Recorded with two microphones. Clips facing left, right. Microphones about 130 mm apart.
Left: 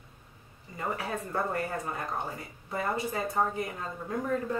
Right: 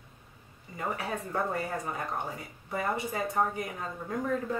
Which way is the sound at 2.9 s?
15° right (ahead or behind).